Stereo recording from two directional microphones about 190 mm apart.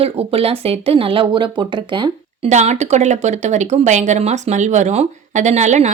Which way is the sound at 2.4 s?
35° right (ahead or behind).